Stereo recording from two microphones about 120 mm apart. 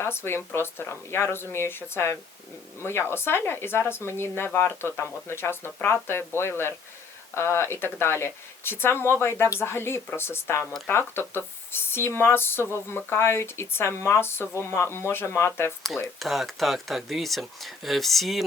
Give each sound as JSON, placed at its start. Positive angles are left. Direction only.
{"t": 0.0, "sound": "speech", "side_deg": 20}
{"t": 16.1, "sound": "speech", "side_deg": 0}